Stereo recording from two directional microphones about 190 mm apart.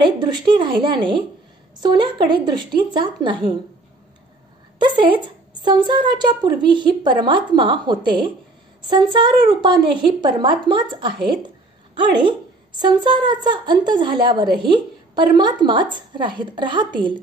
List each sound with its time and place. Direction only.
0.2 s a woman's voice: 25° right (ahead or behind)
4.7 s a woman's voice: 25° right (ahead or behind)